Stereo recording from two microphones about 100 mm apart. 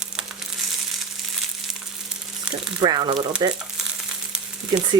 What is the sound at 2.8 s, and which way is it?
Speech, 45° right (ahead or behind).